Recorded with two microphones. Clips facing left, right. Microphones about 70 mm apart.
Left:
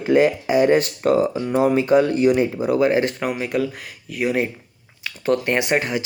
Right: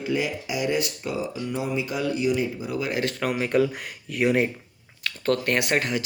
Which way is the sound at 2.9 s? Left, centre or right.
Left.